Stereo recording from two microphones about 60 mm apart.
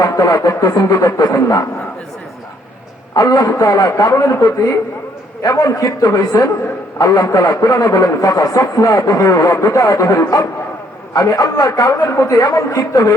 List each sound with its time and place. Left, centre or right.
0.0 s speech: left
3.2 s speech: left
4.2 s speech: left
5.4 s a man's voice: left
7.0 s speech: left
11.2 s speech: left